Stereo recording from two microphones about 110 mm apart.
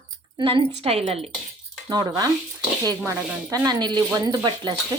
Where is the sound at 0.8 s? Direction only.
65° right (ahead or behind).